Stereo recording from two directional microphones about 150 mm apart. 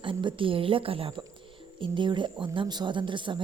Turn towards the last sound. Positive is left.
turn(degrees=-30)  # may be behind; listen again after turning